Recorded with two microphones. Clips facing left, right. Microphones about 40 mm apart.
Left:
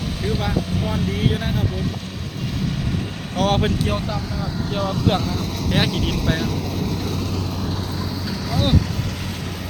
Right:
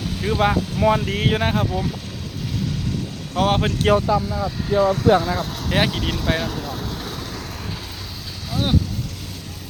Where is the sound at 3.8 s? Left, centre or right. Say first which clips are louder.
Right 8 dB; right.